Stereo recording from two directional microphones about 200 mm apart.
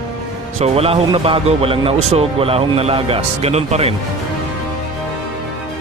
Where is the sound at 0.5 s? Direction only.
30° right (ahead or behind).